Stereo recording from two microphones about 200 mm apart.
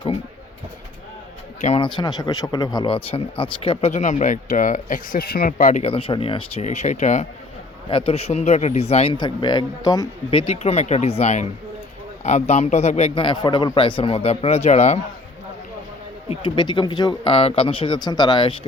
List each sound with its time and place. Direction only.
1.6 s speech: 25° left (ahead or behind)
16.3 s a man's voice: 25° left (ahead or behind)